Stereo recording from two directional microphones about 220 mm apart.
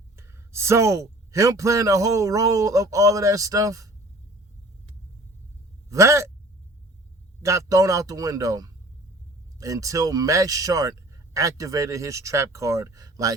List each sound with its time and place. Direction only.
0.2 s speech: 10° right (ahead or behind)
5.9 s speech: 15° right (ahead or behind)
7.4 s speech: 15° right (ahead or behind)